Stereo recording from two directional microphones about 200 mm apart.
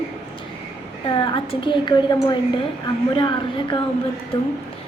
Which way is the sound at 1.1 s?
25° left (ahead or behind).